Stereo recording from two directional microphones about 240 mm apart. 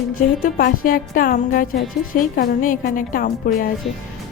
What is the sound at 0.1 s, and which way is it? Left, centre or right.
A woman's voice, left.